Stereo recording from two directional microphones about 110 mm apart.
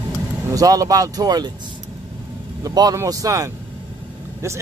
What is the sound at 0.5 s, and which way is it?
Speech, 35° right (ahead or behind).